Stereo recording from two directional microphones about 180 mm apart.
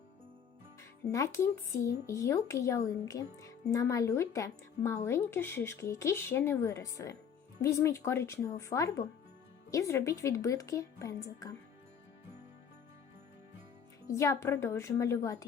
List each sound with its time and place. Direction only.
1.1 s speech: 15° left (ahead or behind)
14.1 s speech: 15° left (ahead or behind)